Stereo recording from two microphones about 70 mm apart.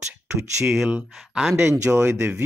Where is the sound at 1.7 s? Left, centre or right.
Right.